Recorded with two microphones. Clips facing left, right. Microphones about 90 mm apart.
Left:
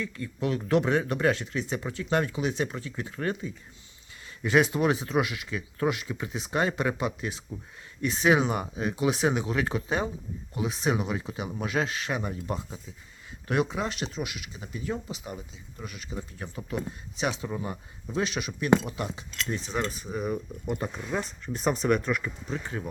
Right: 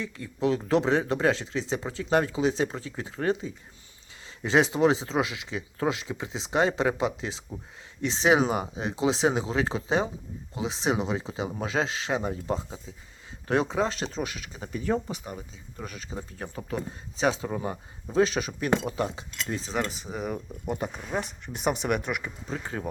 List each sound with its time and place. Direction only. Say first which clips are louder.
0.0 s speech: right 3 dB; 20° right (ahead or behind)
22.4 s speech: right 3 dB; 40° right (ahead or behind)